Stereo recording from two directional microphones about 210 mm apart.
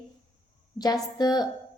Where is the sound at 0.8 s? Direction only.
20° left (ahead or behind).